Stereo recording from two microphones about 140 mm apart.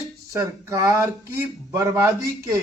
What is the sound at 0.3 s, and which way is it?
Speech, 20° right (ahead or behind).